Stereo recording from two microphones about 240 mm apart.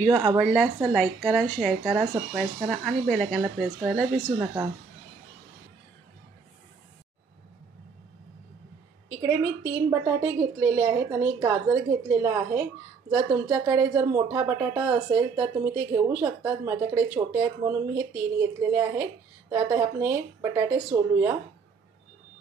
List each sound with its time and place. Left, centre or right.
0.1 s speech: centre
0.4 s speech: centre
9.2 s speech: centre